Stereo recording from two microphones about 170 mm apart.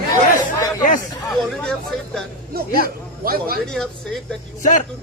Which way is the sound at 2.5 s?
60° right (ahead or behind).